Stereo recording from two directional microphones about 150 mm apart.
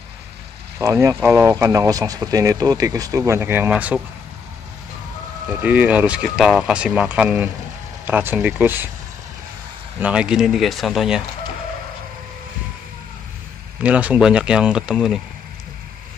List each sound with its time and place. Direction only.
0.7 s speech: 20° right (ahead or behind)
5.6 s speech: 10° right (ahead or behind)
9.9 s speech: 10° right (ahead or behind)
13.8 s speech: 10° right (ahead or behind)